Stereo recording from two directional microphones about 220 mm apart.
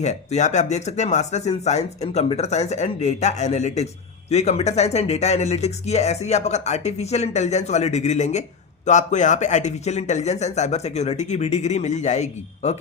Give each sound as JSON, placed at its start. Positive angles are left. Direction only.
{"t": 0.0, "sound": "speech", "side_deg": 30}